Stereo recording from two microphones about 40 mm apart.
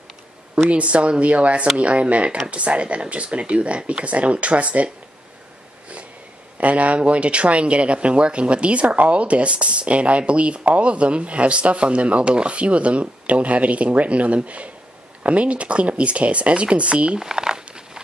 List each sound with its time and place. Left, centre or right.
0.6 s speech: right
6.6 s speech: right
17.2 s a sound: centre